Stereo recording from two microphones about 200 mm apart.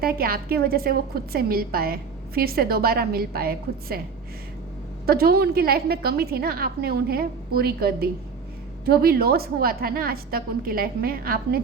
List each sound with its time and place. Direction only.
0.0 s a woman's voice: 50° right (ahead or behind)
5.0 s a woman's voice: 50° right (ahead or behind)